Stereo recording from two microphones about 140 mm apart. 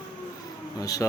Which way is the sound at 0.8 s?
25° left (ahead or behind).